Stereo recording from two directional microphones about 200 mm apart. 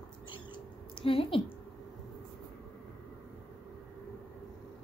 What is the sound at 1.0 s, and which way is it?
Speech, 25° left (ahead or behind).